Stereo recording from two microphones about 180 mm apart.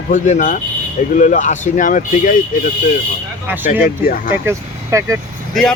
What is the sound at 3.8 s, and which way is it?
Speech, 55° left (ahead or behind).